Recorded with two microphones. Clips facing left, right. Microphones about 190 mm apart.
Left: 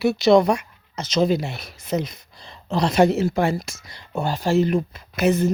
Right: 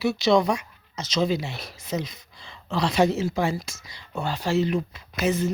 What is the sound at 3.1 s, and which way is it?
Speech, 60° left (ahead or behind).